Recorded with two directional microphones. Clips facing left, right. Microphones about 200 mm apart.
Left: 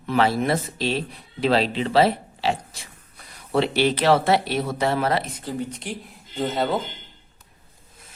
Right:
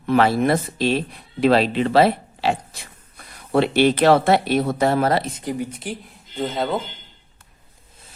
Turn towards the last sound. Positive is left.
turn(degrees=0)  # may be behind; listen again after turning